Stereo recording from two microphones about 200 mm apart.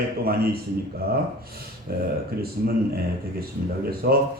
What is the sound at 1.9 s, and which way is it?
A man's voice, 50° right (ahead or behind).